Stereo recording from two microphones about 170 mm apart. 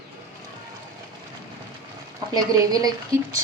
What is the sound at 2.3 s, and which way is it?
A woman's voice, 20° right (ahead or behind).